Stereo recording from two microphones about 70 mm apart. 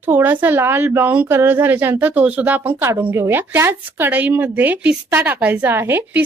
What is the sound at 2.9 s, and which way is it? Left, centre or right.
Speech, right.